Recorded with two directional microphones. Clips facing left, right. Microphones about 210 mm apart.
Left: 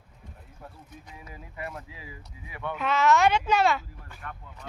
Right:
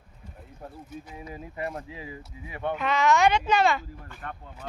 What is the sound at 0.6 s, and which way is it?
Speech, 40° right (ahead or behind).